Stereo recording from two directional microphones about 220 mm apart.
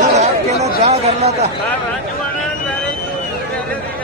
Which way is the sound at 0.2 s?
30° right (ahead or behind).